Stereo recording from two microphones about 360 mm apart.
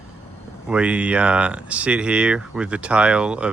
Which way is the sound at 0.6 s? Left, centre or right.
Centre.